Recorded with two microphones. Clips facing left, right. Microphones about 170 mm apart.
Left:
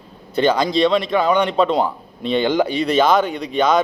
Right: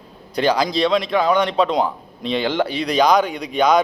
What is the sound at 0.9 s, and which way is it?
A man's voice, 5° left (ahead or behind).